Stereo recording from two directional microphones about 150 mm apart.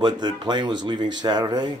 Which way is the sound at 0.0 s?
30° right (ahead or behind).